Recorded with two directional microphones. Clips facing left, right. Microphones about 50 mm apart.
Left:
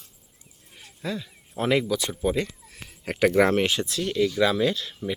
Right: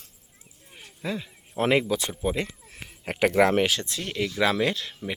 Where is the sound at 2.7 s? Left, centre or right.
Centre.